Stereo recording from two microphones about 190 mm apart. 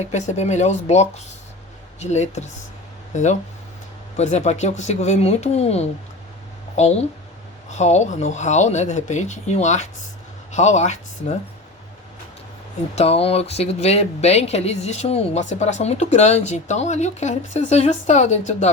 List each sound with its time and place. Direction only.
0.0 s speech: 40° left (ahead or behind)
13.0 s speech: 30° left (ahead or behind)